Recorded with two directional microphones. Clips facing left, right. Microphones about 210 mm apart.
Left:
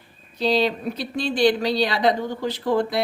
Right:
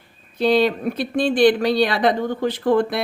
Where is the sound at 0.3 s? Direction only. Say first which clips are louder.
Right 4 dB; 55° right (ahead or behind).